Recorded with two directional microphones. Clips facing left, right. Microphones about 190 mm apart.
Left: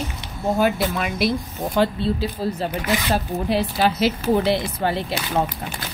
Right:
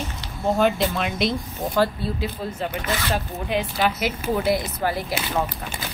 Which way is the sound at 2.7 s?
15° left (ahead or behind).